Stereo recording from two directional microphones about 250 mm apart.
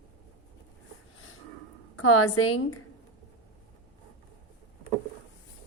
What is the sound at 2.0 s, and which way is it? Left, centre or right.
Speech, left.